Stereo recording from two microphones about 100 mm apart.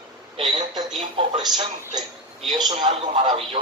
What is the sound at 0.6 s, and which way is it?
A man's voice, 50° right (ahead or behind).